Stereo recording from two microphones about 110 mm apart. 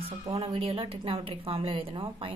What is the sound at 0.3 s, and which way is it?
A woman's voice, 60° right (ahead or behind).